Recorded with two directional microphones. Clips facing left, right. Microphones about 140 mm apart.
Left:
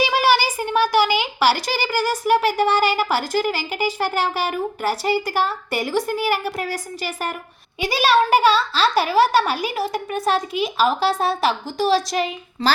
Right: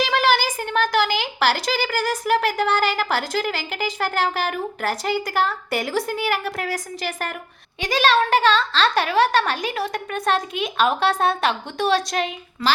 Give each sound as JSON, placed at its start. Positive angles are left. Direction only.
{"t": 0.1, "sound": "a child's voice", "side_deg": 5}
{"t": 12.6, "sound": "a woman's voice", "side_deg": 30}